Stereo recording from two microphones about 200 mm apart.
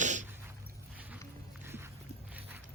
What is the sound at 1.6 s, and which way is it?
Music, 10° right (ahead or behind).